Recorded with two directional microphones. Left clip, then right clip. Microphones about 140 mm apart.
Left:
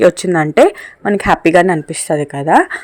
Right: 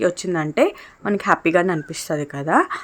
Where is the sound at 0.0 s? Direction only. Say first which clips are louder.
Left 10 dB; 45° left (ahead or behind).